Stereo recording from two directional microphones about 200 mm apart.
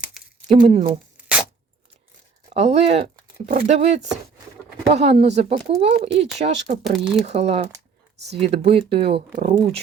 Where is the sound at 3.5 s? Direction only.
40° right (ahead or behind).